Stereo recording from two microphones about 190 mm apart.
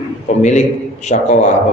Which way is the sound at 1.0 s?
35° left (ahead or behind).